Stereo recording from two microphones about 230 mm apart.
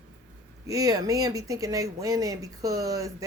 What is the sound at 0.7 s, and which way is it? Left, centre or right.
Speech, centre.